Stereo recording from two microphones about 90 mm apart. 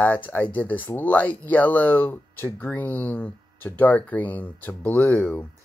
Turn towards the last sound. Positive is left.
turn(degrees=20)  # may be behind; listen again after turning